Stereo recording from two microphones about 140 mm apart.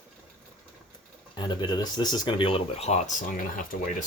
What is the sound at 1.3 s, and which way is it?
Speech, 30° left (ahead or behind).